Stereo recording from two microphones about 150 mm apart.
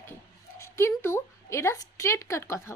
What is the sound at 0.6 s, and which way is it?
Speech, 15° left (ahead or behind).